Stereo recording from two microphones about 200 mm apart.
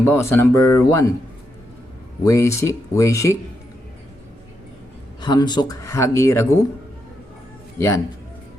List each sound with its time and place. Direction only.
0.0 s speech: 10° left (ahead or behind)
2.2 s speech: 15° left (ahead or behind)
5.2 s speech: 20° left (ahead or behind)